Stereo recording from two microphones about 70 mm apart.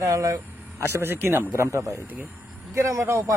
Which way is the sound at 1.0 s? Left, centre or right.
Right.